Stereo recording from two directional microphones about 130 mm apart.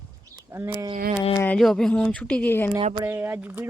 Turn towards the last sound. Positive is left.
turn(degrees=-15)  # may be behind; listen again after turning